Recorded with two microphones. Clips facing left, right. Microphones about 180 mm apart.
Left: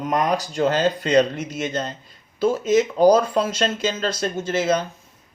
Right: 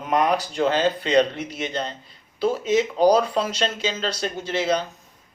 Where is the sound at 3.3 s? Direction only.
50° left (ahead or behind).